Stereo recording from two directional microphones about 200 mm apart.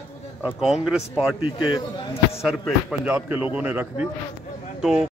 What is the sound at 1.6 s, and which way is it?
Speech, 20° left (ahead or behind).